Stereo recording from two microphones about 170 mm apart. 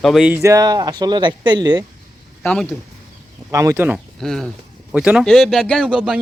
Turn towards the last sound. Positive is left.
turn(degrees=-5)  # may be behind; listen again after turning